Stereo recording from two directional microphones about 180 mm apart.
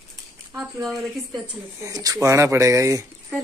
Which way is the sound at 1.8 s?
20° right (ahead or behind).